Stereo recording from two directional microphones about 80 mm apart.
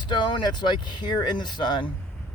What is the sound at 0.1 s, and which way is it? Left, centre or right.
Speech, left.